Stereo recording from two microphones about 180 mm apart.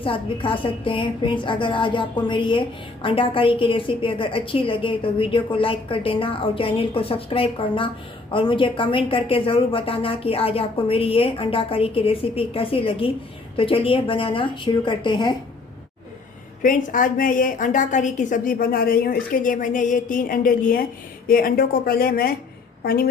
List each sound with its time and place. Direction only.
0.0 s a woman's voice: 30° left (ahead or behind)
16.6 s a woman's voice: 50° left (ahead or behind)